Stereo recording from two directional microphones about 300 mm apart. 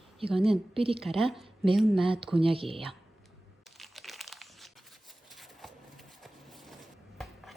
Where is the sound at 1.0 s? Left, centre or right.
Centre.